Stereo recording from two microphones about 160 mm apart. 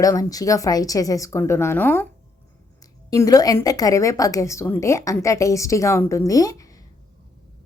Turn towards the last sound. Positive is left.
turn(degrees=20)  # may be behind; listen again after turning